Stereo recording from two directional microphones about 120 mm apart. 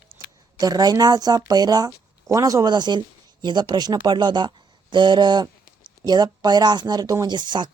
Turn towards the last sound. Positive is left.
turn(degrees=-35)  # may be behind; listen again after turning